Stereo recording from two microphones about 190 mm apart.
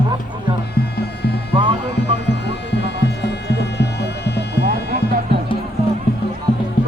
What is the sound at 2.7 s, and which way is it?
Music, 65° left (ahead or behind).